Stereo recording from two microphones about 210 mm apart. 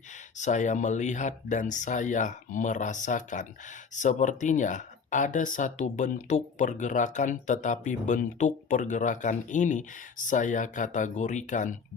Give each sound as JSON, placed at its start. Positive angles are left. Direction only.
{"t": 0.3, "sound": "speech", "side_deg": 35}